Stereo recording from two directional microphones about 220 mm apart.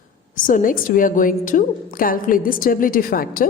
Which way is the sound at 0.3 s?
40° left (ahead or behind).